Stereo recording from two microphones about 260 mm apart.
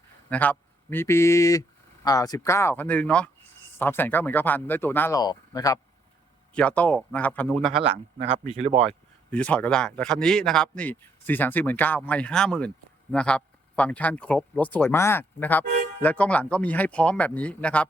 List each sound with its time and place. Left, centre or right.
0.3 s speech: centre
8.4 s speech: right
8.9 s speech: centre